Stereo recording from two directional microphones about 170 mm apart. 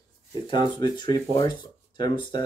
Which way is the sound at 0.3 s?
25° left (ahead or behind).